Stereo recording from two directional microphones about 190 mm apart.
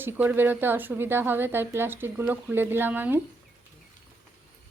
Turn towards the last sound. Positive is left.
turn(degrees=-10)  # may be behind; listen again after turning